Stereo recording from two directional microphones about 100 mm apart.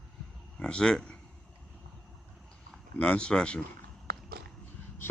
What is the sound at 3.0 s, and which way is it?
Speech, 10° left (ahead or behind).